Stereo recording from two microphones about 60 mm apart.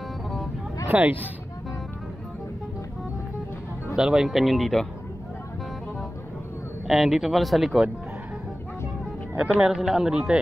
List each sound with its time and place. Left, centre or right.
0.8 s speech: right
3.9 s speech: centre
6.9 s speech: centre
9.4 s a man's voice: centre